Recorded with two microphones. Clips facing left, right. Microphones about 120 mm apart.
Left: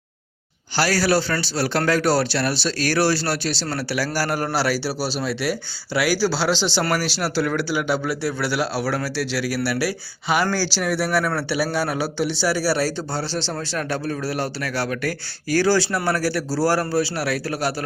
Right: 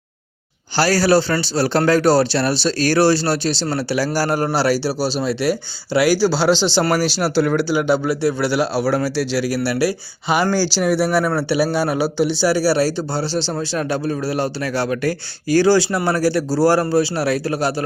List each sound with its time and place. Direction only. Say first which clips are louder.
0.8 s speech: right 5 dB; 30° right (ahead or behind)